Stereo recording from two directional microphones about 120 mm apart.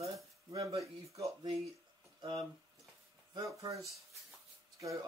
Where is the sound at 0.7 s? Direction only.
25° right (ahead or behind).